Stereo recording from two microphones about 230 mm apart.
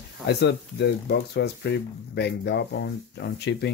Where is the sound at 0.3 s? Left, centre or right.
Left.